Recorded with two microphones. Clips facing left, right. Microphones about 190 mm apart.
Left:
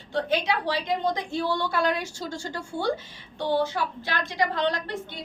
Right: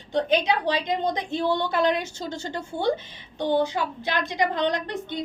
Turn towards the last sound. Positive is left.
turn(degrees=-20)  # may be behind; listen again after turning